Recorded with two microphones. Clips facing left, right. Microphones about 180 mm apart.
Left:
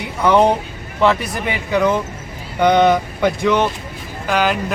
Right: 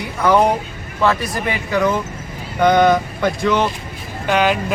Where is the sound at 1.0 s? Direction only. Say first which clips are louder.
Left 1 dB; 15° left (ahead or behind).